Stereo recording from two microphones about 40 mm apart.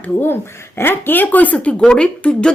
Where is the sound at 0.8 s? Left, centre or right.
Left.